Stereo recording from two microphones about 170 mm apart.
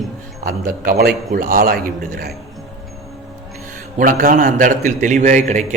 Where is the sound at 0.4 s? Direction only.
60° right (ahead or behind).